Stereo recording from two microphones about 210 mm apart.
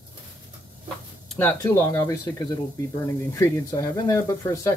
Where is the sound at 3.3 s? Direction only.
15° left (ahead or behind).